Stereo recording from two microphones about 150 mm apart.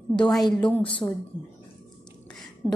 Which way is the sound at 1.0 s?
25° left (ahead or behind).